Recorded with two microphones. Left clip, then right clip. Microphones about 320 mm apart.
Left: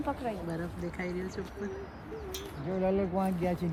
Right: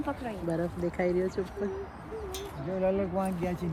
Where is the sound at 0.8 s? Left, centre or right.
Centre.